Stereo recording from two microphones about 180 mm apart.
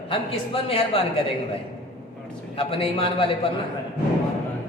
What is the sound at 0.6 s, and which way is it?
Speech, 30° left (ahead or behind).